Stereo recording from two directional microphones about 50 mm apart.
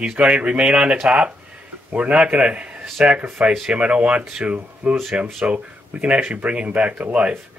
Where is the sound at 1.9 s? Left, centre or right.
Right.